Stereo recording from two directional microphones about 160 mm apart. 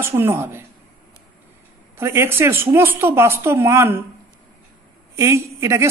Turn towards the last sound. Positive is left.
turn(degrees=-15)  # may be behind; listen again after turning